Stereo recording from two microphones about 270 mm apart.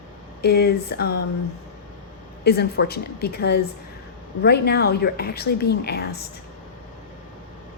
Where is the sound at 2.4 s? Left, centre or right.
Left.